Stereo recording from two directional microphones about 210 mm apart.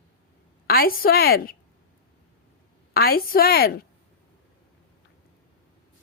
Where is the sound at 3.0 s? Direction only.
45° left (ahead or behind).